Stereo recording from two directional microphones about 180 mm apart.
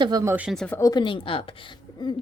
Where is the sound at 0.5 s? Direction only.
5° left (ahead or behind).